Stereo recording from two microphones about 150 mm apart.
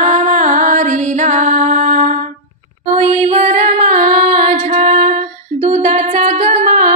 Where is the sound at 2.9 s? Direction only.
40° right (ahead or behind).